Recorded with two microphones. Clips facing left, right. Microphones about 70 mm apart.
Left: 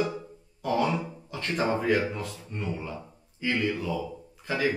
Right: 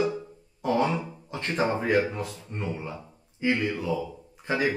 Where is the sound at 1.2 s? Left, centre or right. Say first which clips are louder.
Right 2 dB; right.